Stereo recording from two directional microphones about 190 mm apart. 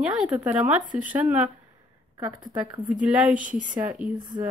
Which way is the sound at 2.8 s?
5° right (ahead or behind).